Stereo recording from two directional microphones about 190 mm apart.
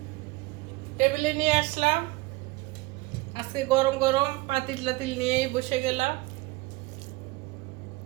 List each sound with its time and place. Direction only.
0.9 s a woman's voice: 40° right (ahead or behind)
3.3 s a woman's voice: 20° right (ahead or behind)